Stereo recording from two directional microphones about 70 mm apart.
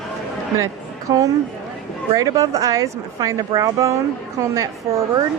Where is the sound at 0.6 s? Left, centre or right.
Right.